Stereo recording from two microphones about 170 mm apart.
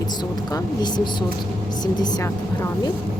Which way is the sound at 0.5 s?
25° left (ahead or behind).